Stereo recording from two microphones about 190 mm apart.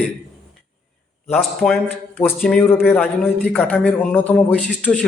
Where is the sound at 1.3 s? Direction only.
Centre (ahead or behind).